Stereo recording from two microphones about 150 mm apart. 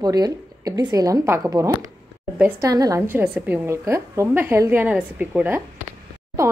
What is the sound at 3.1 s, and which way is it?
A woman's voice, 15° right (ahead or behind).